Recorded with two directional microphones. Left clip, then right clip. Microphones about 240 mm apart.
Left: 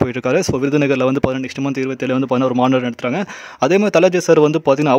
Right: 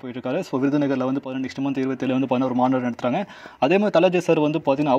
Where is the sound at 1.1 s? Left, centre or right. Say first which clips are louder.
Left 9 dB; left.